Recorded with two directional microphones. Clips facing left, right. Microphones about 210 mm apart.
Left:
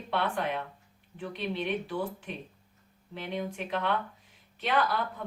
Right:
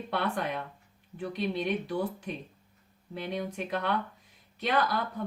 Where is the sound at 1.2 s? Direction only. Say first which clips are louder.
Right 2 dB; 40° right (ahead or behind).